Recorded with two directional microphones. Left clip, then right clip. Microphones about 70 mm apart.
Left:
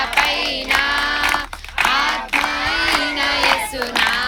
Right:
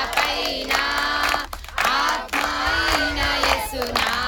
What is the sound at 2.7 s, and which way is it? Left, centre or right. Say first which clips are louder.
Crowd: left 3 dB; right.